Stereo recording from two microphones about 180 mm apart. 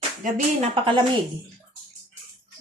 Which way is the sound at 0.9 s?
25° right (ahead or behind).